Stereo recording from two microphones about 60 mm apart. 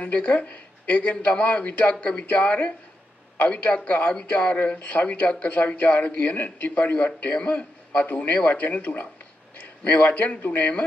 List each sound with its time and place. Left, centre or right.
0.0 s a man's voice: left